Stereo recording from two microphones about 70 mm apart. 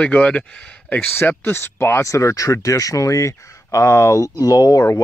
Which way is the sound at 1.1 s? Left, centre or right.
Left.